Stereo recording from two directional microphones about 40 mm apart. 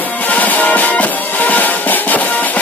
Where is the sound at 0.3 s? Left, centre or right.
Left.